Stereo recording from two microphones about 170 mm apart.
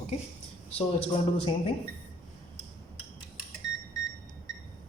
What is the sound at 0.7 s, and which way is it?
Speech, 35° left (ahead or behind).